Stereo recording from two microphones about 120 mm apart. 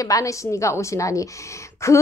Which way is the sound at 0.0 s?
25° left (ahead or behind).